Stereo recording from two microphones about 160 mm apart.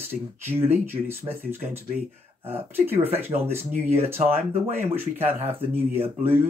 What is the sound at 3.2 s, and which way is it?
Speech, 15° right (ahead or behind).